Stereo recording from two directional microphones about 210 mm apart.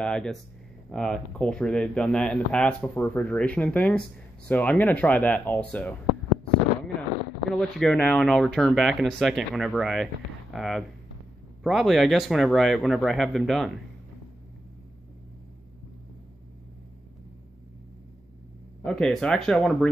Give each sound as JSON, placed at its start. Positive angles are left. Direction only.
{"t": 0.0, "sound": "speech", "side_deg": 5}
{"t": 7.4, "sound": "speech", "side_deg": 0}
{"t": 18.9, "sound": "speech", "side_deg": 5}